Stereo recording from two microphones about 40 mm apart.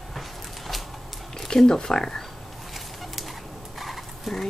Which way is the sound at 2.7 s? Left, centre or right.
Centre.